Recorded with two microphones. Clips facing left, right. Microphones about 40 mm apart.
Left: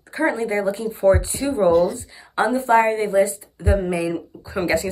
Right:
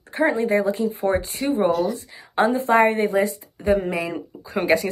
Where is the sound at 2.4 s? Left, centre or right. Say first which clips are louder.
Even; right.